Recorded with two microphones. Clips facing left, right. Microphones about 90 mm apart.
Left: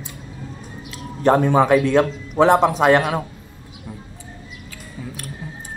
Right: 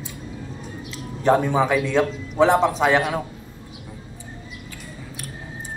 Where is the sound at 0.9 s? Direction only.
55° left (ahead or behind).